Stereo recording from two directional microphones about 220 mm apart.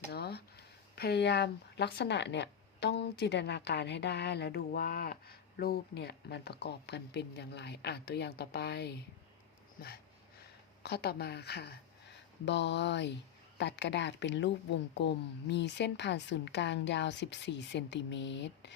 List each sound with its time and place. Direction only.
0.1 s speech: 50° left (ahead or behind)
9.8 s dog: 40° left (ahead or behind)
10.8 s speech: 45° left (ahead or behind)